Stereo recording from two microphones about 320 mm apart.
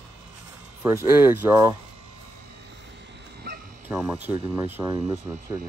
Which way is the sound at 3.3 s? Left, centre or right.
Right.